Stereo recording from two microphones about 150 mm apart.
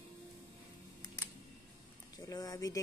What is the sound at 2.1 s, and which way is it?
Speech, 25° left (ahead or behind).